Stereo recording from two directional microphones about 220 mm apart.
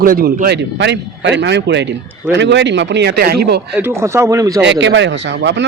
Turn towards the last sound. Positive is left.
turn(degrees=-55)  # may be behind; listen again after turning